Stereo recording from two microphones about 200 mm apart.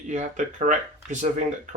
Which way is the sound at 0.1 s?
35° right (ahead or behind).